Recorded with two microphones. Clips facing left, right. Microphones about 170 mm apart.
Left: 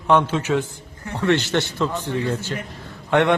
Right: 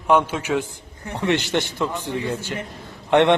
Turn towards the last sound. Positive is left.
turn(degrees=-20)  # may be behind; listen again after turning